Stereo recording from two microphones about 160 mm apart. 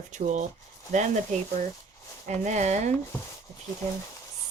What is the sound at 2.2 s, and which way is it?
Speech, 45° right (ahead or behind).